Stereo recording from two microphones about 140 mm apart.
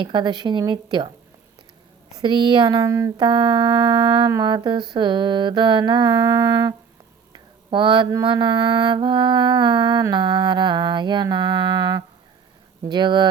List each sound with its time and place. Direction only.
0.0 s mantra: 35° right (ahead or behind)
2.1 s mantra: 35° right (ahead or behind)
3.2 s mantra: 35° right (ahead or behind)
7.3 s a sound: 35° right (ahead or behind)
8.2 s mantra: 35° right (ahead or behind)